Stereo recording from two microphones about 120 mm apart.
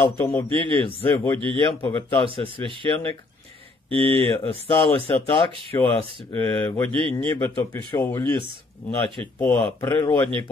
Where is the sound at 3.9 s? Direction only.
50° right (ahead or behind).